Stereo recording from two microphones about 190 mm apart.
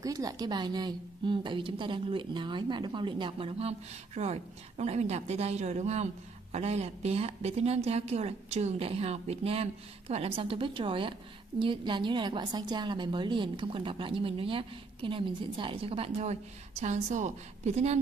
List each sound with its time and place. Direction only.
0.0 s a woman's voice: 20° right (ahead or behind); by 17.9 s 35° right (ahead or behind)